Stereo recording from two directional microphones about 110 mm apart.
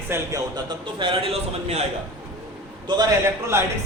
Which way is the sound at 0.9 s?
55° right (ahead or behind).